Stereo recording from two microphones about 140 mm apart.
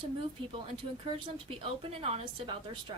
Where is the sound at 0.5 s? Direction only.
40° right (ahead or behind).